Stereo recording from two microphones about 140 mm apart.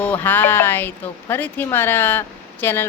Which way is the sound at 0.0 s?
15° left (ahead or behind).